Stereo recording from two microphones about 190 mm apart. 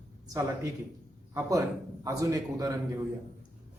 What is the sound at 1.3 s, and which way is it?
A woman's voice, 15° right (ahead or behind).